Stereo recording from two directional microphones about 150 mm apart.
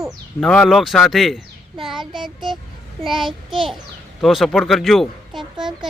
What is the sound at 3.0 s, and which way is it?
Speech, centre (ahead or behind).